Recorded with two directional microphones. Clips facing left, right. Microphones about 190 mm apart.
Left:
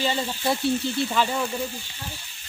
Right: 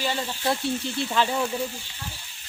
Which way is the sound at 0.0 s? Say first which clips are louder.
Left 2 dB; 15° left (ahead or behind).